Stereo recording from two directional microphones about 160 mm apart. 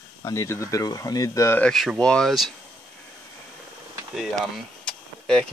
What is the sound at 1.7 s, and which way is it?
Speech, centre (ahead or behind).